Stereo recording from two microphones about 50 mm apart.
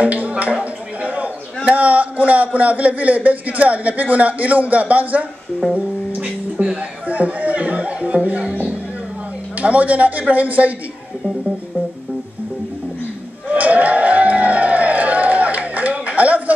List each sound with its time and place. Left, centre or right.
0.0 s speech: right
9.6 s a man's voice: right
13.5 s crowd: right